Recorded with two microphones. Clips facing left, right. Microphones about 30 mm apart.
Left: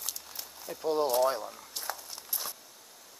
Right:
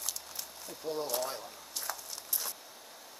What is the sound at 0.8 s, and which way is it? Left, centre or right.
Speech, left.